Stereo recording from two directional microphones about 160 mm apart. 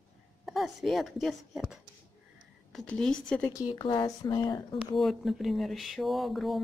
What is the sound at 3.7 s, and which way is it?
Speech, 30° left (ahead or behind).